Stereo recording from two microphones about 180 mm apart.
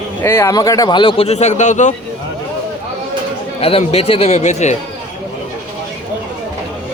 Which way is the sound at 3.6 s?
30° left (ahead or behind).